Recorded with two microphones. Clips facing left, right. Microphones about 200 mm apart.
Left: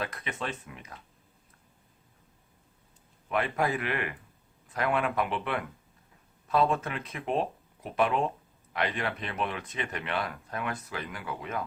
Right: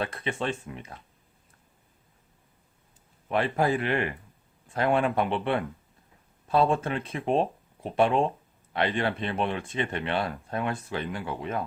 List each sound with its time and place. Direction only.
0.0 s speech: 30° right (ahead or behind)
3.2 s a man's voice: 30° right (ahead or behind)